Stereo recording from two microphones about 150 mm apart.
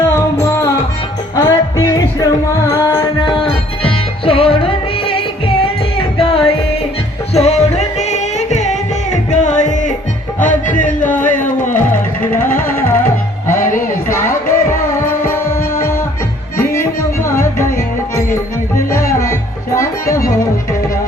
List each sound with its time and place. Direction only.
1.4 s music: 25° left (ahead or behind)
3.2 s music: 35° left (ahead or behind); by 11.9 s 60° left (ahead or behind)
12.5 s music: 15° left (ahead or behind)
13.5 s music: 60° left (ahead or behind)
14.1 s music: 20° left (ahead or behind)
17.2 s music: 20° left (ahead or behind)
19.2 s music: 20° left (ahead or behind)